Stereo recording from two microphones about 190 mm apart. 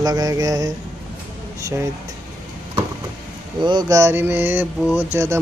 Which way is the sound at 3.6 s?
25° right (ahead or behind).